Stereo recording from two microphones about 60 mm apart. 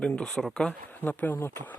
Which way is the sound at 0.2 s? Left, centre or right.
Centre.